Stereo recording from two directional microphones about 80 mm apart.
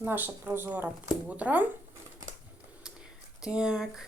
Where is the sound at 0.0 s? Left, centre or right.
Right.